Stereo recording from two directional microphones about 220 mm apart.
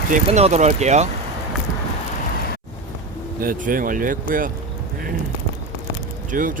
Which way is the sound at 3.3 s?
40° right (ahead or behind).